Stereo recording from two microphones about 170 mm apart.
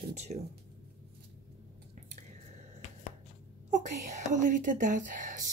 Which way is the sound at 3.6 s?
45° right (ahead or behind).